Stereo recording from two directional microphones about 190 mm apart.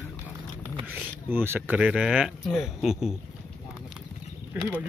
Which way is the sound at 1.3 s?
10° right (ahead or behind).